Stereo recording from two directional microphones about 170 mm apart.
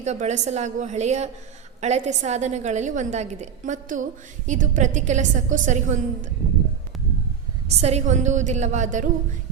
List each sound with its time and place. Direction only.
0.0 s a woman's voice: 40° right (ahead or behind)
7.7 s a woman's voice: 40° right (ahead or behind)